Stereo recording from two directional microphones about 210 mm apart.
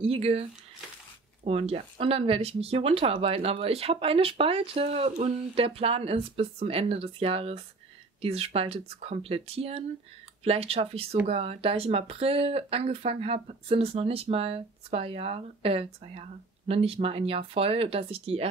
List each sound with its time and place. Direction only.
0.0 s speech: 30° right (ahead or behind)